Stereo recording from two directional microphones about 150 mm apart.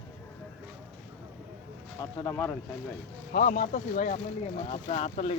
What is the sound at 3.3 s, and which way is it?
Speech, 65° left (ahead or behind).